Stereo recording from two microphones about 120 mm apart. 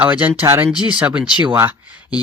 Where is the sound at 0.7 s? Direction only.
35° left (ahead or behind).